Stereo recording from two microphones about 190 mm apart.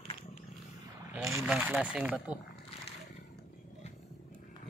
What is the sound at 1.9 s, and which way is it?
Speech, 5° right (ahead or behind).